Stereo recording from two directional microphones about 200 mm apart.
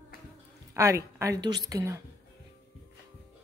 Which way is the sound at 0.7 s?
15° right (ahead or behind).